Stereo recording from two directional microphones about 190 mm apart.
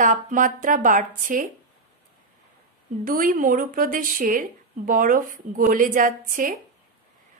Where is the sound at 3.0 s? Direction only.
45° right (ahead or behind).